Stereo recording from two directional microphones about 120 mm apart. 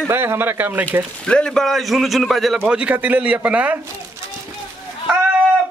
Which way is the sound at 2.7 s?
10° right (ahead or behind).